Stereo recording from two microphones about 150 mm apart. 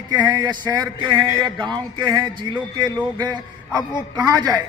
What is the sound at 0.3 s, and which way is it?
A man's voice, 30° right (ahead or behind).